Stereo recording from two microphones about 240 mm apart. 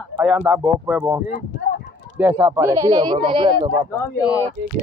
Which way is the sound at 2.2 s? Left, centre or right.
Centre.